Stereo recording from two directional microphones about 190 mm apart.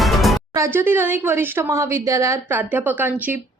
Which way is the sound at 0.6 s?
10° right (ahead or behind).